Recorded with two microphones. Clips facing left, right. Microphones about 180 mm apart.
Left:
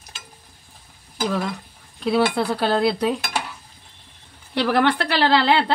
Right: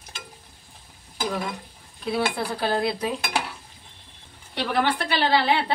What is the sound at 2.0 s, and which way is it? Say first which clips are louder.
A woman's voice: left 6 dB; 70° left (ahead or behind).